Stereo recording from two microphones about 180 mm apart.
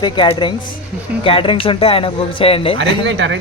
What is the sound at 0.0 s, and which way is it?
Speech, 25° left (ahead or behind).